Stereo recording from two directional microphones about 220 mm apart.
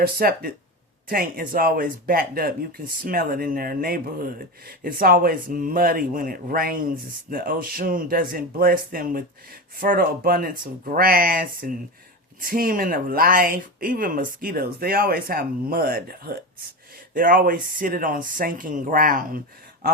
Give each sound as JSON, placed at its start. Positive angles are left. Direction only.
{"t": 0.0, "sound": "speech", "side_deg": -45}